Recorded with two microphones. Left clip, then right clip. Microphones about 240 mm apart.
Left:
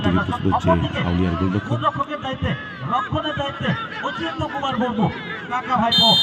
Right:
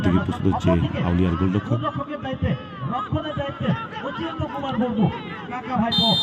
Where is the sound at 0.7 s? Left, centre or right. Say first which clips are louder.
Left 4 dB; left.